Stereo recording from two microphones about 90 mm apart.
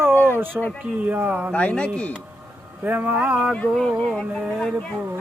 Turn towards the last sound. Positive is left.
turn(degrees=5)  # may be behind; listen again after turning